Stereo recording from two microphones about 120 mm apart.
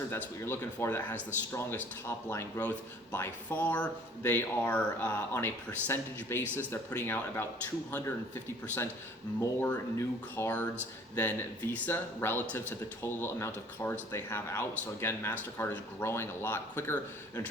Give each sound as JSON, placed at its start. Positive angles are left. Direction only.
{"t": 0.1, "sound": "speech", "side_deg": 20}